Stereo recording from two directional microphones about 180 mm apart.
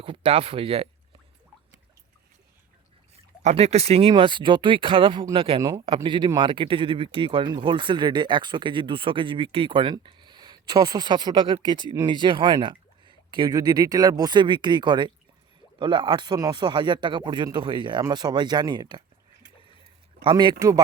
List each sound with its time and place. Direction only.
0.0 s speech: 30° right (ahead or behind)
3.4 s speech: 35° right (ahead or behind)
20.2 s speech: 25° right (ahead or behind)